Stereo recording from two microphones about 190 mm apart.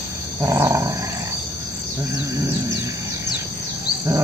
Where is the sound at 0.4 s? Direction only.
15° right (ahead or behind).